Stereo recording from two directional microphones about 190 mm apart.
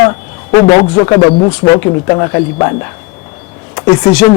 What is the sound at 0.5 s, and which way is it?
Speech, 20° left (ahead or behind).